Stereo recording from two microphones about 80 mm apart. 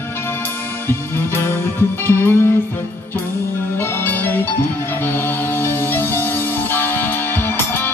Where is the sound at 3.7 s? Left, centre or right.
Left.